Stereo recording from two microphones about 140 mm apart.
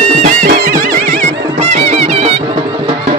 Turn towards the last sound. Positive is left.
turn(degrees=-50)  # may be behind; listen again after turning